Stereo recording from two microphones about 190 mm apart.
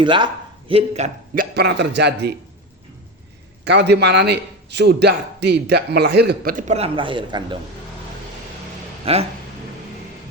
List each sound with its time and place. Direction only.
0.0 s a man's voice: 25° right (ahead or behind)
1.5 s a man's voice: 60° right (ahead or behind)
3.6 s a man's voice: 60° right (ahead or behind); by 7.4 s 25° right (ahead or behind)
9.1 s speech: 30° right (ahead or behind)